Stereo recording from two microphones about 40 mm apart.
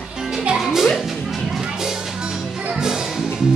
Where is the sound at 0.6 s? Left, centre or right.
Centre.